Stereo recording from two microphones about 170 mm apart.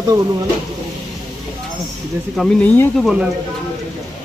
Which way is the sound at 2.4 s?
5° left (ahead or behind).